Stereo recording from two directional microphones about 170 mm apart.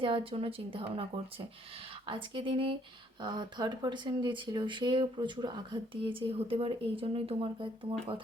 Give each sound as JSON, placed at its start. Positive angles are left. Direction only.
{"t": 0.0, "sound": "speech", "side_deg": -30}